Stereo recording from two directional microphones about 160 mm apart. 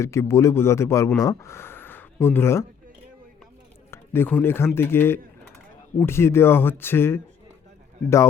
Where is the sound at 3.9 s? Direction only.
15° left (ahead or behind).